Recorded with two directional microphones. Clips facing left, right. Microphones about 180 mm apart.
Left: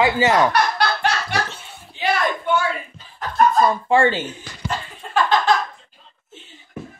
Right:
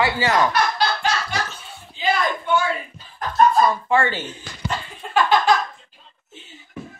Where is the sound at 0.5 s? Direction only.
65° left (ahead or behind).